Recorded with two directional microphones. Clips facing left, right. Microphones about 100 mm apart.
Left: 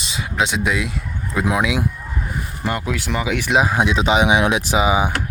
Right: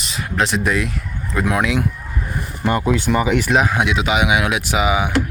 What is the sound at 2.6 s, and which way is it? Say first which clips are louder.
Speech: right 6 dB; centre (ahead or behind).